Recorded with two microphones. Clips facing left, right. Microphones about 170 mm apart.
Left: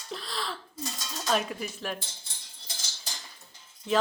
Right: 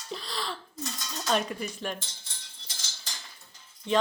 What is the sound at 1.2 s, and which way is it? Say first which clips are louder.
Speech: even; centre (ahead or behind).